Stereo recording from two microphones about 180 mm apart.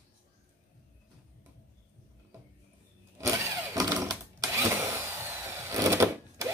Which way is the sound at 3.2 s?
15° right (ahead or behind).